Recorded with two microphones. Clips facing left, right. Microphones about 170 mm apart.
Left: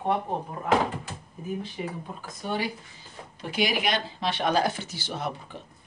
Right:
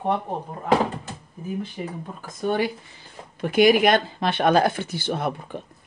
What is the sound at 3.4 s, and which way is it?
Speech, 50° right (ahead or behind).